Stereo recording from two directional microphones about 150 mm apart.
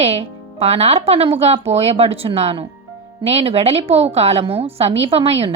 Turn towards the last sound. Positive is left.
turn(degrees=-40)  # may be behind; listen again after turning